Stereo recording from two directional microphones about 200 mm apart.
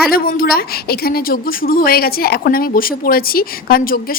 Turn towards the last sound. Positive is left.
turn(degrees=45)  # may be behind; listen again after turning